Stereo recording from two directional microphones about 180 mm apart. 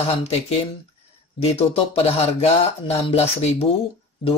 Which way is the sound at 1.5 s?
35° left (ahead or behind).